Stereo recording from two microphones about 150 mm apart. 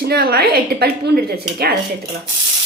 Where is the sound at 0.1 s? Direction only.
90° right.